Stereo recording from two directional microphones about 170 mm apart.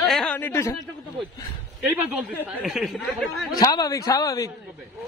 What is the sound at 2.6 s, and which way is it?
Speech, centre (ahead or behind).